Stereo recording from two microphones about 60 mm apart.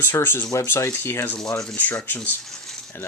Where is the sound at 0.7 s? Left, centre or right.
Left.